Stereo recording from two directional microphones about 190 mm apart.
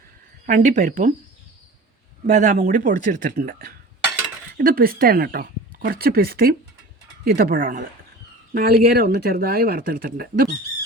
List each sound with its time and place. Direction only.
0.4 s speech: 40° right (ahead or behind)
2.2 s speech: 40° right (ahead or behind)